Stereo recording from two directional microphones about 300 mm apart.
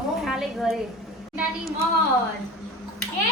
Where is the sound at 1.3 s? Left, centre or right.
Centre.